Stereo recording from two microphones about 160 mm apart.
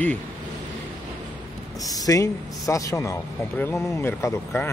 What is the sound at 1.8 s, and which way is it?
Speech, 20° left (ahead or behind).